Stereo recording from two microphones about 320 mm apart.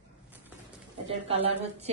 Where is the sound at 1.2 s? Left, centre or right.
Centre.